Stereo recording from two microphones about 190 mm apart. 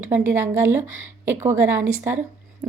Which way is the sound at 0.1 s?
10° right (ahead or behind).